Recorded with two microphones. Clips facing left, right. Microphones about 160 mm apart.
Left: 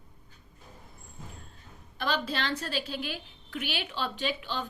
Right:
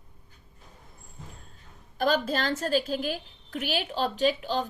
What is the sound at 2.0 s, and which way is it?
A woman's voice, 45° right (ahead or behind).